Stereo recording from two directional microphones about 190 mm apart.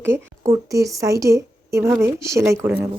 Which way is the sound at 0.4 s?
15° right (ahead or behind).